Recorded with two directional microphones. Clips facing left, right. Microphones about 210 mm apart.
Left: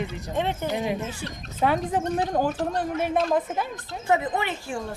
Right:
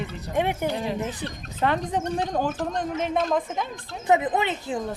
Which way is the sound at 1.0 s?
20° right (ahead or behind).